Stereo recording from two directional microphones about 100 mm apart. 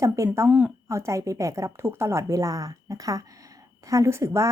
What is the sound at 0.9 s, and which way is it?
A woman's voice, 30° right (ahead or behind).